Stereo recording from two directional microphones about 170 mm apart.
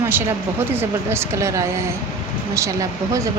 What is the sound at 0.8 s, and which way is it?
A woman's voice, 15° right (ahead or behind).